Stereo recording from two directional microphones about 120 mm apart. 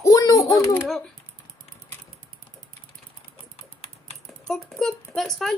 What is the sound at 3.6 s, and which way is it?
Typing, 60° left (ahead or behind).